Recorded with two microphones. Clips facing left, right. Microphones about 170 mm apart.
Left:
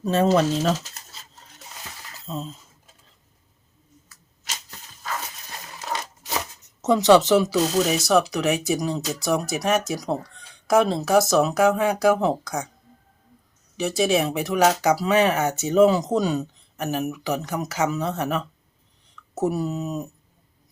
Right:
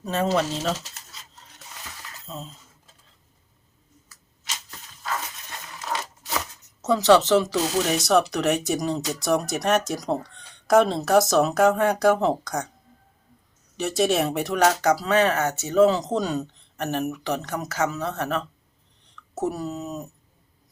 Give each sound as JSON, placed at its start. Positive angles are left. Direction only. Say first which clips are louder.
{"t": 0.0, "sound": "speech", "louder": "left 5 dB", "side_deg": 30}
{"t": 6.8, "sound": "speech", "louder": "left 2 dB", "side_deg": 15}
{"t": 13.7, "sound": "speech", "louder": "left 1 dB", "side_deg": 0}